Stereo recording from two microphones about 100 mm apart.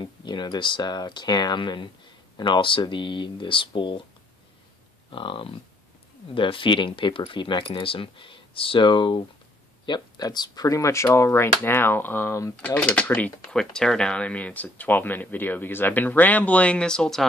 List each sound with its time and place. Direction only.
0.0 s speech: 50° left (ahead or behind)
5.1 s speech: 60° left (ahead or behind); by 12.5 s 30° left (ahead or behind)
12.6 s speech: 15° left (ahead or behind)